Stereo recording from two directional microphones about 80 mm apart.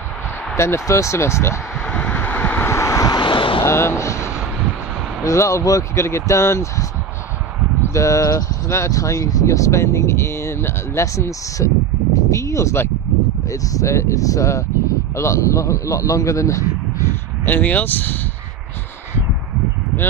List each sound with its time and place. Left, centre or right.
0.6 s speech: left
1.9 s vehicle: centre
2.7 s vehicle: left
3.2 s vehicle: left
3.6 s speech: left
13.5 s speech: left
17.5 s speech: left